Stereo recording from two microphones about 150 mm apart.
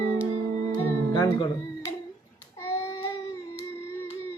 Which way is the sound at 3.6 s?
20° left (ahead or behind).